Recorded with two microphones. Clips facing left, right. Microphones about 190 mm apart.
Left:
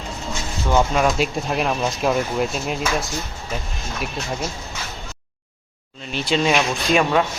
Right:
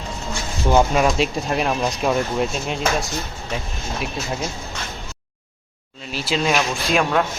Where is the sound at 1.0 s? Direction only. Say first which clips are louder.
Right 1 dB; centre (ahead or behind).